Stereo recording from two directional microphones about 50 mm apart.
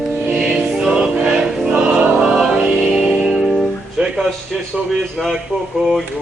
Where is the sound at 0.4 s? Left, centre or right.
Centre.